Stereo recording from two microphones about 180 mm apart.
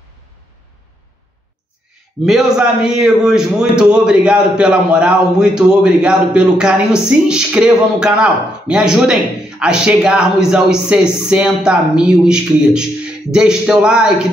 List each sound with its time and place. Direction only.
2.2 s a man's voice: centre (ahead or behind)